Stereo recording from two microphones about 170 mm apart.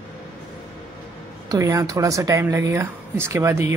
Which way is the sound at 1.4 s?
20° right (ahead or behind).